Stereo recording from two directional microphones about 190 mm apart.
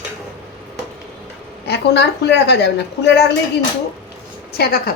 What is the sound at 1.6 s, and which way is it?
A woman's voice, 60° left (ahead or behind).